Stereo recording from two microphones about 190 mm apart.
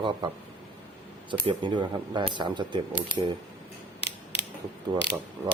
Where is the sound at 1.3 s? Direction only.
25° right (ahead or behind).